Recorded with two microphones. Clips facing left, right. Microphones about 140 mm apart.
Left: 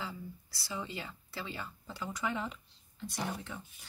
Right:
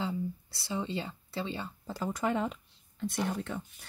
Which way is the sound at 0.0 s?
25° right (ahead or behind).